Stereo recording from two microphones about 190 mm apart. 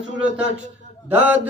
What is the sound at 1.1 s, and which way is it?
Speech, 10° right (ahead or behind).